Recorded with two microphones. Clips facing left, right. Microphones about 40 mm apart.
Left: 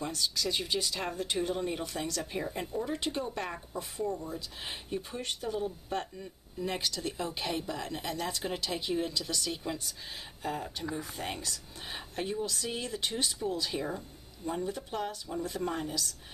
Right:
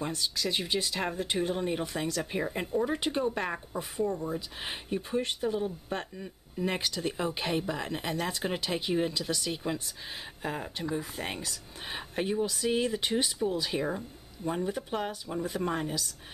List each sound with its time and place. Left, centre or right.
0.0 s speech: centre